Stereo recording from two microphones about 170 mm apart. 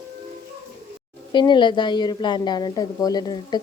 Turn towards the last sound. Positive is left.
turn(degrees=25)  # may be behind; listen again after turning